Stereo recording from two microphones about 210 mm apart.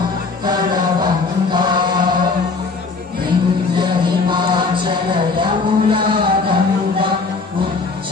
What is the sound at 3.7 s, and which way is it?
Music, 20° right (ahead or behind).